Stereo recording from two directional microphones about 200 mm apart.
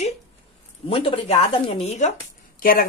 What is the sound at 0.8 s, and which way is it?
Speech, 30° left (ahead or behind).